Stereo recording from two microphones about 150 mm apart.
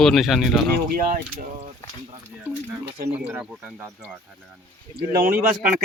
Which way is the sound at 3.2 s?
10° right (ahead or behind).